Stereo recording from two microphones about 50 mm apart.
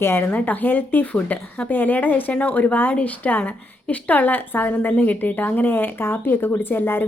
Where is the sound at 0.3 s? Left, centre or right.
Left.